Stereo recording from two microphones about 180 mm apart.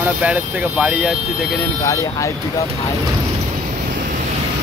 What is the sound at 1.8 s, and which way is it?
Speech, 15° left (ahead or behind).